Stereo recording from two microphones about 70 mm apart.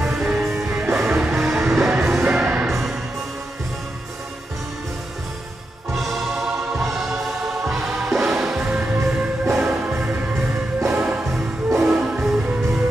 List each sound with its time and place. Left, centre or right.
0.0 s music: centre
0.8 s music: right
1.1 s music: centre
2.3 s music: centre
2.7 s music: centre
5.9 s music: centre
8.7 s music: right
9.8 s music: right